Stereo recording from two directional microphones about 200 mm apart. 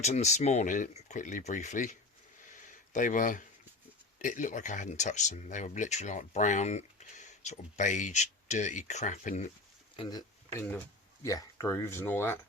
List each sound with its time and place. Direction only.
0.0 s speech: 35° left (ahead or behind)
9.9 s speech: 20° left (ahead or behind)